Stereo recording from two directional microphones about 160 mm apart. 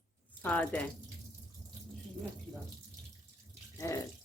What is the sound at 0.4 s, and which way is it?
Speech, 10° left (ahead or behind).